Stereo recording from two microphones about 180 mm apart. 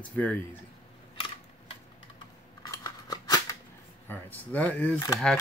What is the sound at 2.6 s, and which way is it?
Scissors, 20° left (ahead or behind).